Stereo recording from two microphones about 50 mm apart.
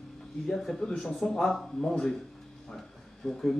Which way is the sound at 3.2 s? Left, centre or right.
Centre.